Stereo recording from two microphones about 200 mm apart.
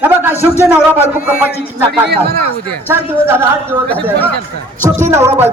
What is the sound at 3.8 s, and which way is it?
Speech, 10° left (ahead or behind).